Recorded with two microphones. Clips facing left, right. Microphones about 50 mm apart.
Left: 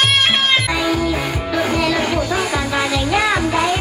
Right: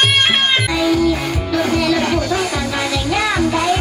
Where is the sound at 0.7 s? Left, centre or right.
Centre.